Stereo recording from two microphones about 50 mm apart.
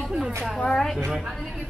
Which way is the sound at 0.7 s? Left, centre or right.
Centre.